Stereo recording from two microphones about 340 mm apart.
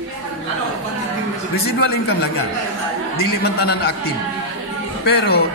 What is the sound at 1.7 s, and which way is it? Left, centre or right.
Speech, left.